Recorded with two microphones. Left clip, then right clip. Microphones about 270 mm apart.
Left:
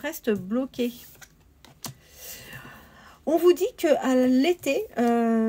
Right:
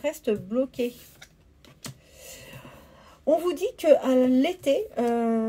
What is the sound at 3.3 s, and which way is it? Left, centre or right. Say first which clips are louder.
A woman's voice: left 3 dB; left.